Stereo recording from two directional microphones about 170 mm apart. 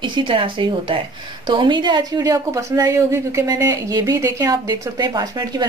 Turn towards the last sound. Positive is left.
turn(degrees=-25)  # may be behind; listen again after turning